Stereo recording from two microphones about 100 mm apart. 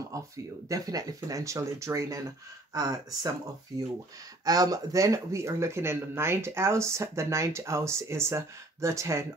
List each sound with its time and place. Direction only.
0.1 s a sound: 35° right (ahead or behind)
0.7 s speech: 35° right (ahead or behind)
4.5 s speech: 40° right (ahead or behind)